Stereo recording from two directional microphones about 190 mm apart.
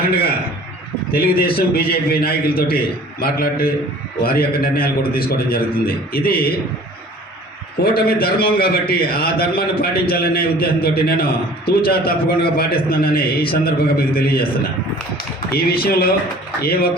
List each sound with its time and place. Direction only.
1.1 s a man's voice: 50° left (ahead or behind)
7.9 s a man's voice: 55° left (ahead or behind)
15.4 s a man's voice: 55° left (ahead or behind)